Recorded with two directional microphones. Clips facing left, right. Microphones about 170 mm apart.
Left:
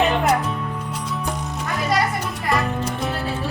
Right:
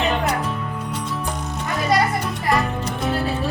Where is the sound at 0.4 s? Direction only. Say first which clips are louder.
Even; centre (ahead or behind).